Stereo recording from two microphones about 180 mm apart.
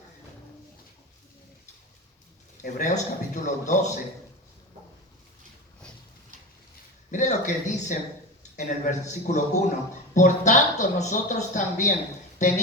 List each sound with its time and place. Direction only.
2.6 s speech: 45° left (ahead or behind)
7.1 s speech: 45° left (ahead or behind)